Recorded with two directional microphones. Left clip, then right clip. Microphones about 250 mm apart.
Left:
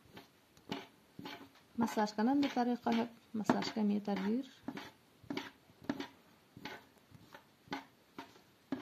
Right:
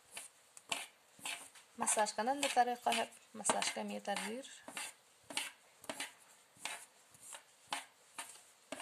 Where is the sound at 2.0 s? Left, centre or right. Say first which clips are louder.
Left 1 dB; right.